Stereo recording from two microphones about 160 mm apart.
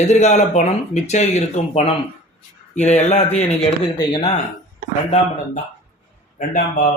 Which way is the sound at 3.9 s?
30° left (ahead or behind).